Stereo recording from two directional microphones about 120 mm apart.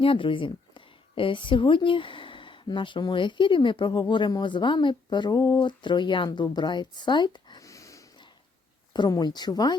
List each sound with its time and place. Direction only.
0.0 s a woman's voice: 45° left (ahead or behind)
7.6 s a sound: 25° left (ahead or behind)
8.9 s speech: 35° left (ahead or behind)